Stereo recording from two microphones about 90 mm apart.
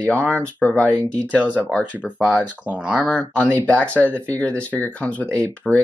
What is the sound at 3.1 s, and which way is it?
Speech, 15° left (ahead or behind).